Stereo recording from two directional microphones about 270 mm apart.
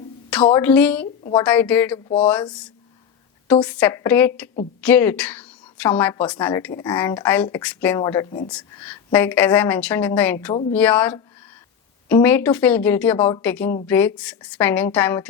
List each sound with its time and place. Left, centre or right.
0.5 s a woman's voice: centre
3.5 s a woman's voice: centre
10.5 s speech: left
10.8 s a woman's voice: centre